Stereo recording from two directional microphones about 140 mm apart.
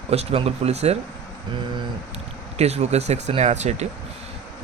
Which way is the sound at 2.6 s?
50° right (ahead or behind).